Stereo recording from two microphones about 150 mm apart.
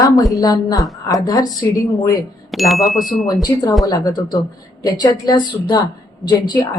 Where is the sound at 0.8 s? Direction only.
Centre (ahead or behind).